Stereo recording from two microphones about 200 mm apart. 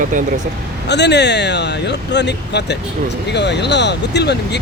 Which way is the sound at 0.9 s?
60° left (ahead or behind).